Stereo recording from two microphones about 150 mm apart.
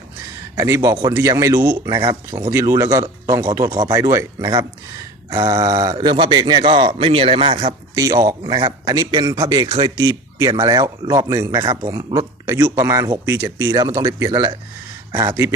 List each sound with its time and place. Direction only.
0.5 s speech: 20° right (ahead or behind); by 7.7 s 40° right (ahead or behind)
7.9 s speech: 25° right (ahead or behind)